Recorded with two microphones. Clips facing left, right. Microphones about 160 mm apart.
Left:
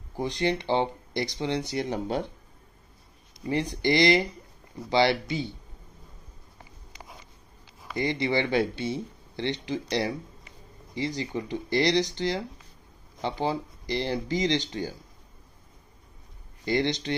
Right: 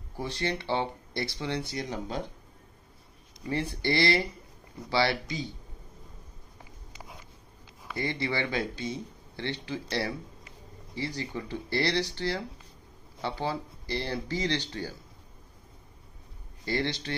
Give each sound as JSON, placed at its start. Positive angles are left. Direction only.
{"t": 0.2, "sound": "speech", "side_deg": 20}
{"t": 3.4, "sound": "speech", "side_deg": 20}
{"t": 6.6, "sound": "a sound", "side_deg": -5}
{"t": 7.9, "sound": "speech", "side_deg": 20}
{"t": 16.6, "sound": "speech", "side_deg": 20}